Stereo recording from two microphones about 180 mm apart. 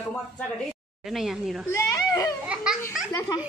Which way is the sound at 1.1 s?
Centre (ahead or behind).